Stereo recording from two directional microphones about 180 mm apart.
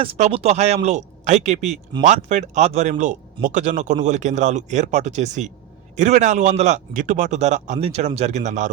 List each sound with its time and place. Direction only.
0.0 s speech: 35° right (ahead or behind)